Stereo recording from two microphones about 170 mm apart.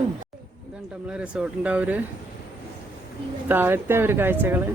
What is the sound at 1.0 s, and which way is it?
Speech, 5° right (ahead or behind).